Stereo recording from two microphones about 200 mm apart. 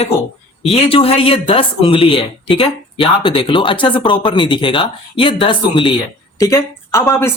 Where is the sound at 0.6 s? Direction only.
30° left (ahead or behind).